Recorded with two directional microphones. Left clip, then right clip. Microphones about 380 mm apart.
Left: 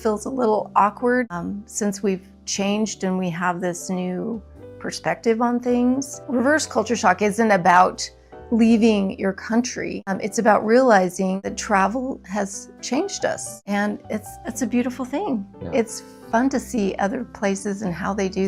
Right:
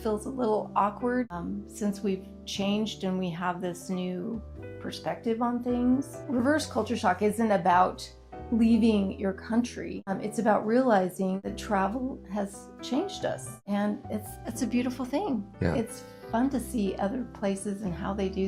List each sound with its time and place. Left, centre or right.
0.0 s a woman's voice: left
14.5 s a woman's voice: left
16.3 s a woman's voice: left